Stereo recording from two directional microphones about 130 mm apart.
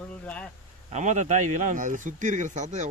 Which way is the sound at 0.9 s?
65° right (ahead or behind).